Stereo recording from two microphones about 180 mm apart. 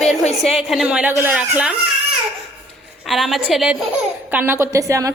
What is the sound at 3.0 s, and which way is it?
A woman's voice, centre (ahead or behind).